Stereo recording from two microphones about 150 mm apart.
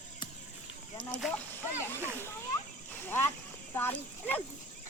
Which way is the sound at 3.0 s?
15° left (ahead or behind).